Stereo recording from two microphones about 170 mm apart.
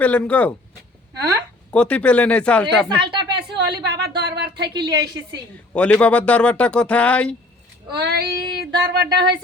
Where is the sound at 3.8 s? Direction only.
75° right (ahead or behind).